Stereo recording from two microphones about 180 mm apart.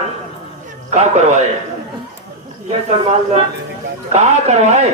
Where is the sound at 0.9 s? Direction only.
40° right (ahead or behind).